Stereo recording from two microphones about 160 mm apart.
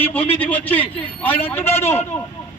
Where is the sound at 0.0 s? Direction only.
10° left (ahead or behind).